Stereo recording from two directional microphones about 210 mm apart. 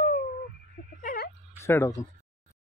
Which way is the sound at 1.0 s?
45° left (ahead or behind).